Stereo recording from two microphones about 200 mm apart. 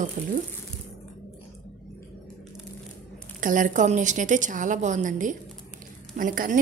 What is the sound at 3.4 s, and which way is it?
A woman's voice, 40° right (ahead or behind).